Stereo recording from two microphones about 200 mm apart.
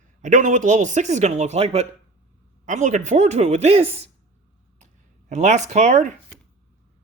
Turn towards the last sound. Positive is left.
turn(degrees=-35)  # may be behind; listen again after turning